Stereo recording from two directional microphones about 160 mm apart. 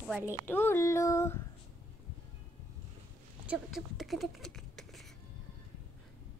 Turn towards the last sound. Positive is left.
turn(degrees=0)  # may be behind; listen again after turning